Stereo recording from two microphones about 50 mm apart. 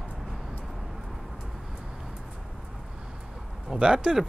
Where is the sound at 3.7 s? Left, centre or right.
Centre.